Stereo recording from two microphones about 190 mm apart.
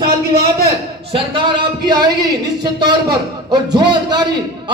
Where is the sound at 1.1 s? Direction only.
25° right (ahead or behind).